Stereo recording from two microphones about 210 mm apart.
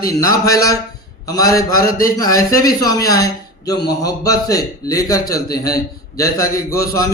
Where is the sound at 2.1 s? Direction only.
15° left (ahead or behind).